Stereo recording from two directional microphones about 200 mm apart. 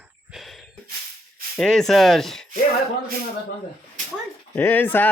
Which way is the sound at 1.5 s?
5° left (ahead or behind).